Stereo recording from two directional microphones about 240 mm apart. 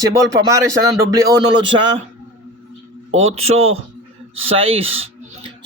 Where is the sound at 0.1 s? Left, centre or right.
Centre.